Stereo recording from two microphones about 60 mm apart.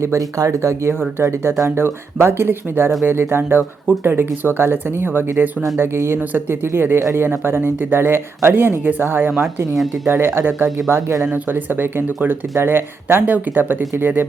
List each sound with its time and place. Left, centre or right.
0.2 s speech: right
9.7 s speech: centre
10.1 s speech: right
11.3 s speech: right